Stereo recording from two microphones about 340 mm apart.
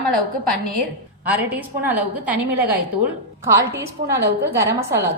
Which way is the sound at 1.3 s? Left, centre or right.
Centre.